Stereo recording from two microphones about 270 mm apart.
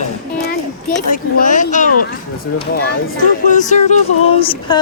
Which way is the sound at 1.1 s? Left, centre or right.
Left.